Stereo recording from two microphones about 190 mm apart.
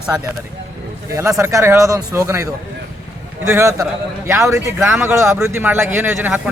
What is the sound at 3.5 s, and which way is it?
A man's voice, 15° right (ahead or behind).